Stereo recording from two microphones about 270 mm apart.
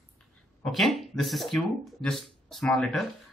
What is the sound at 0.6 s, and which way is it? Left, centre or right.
Speech, centre.